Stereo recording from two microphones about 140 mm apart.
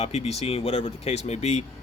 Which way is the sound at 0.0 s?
50° left (ahead or behind).